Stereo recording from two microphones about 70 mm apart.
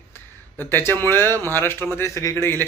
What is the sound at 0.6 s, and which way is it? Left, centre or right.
A man's voice, left.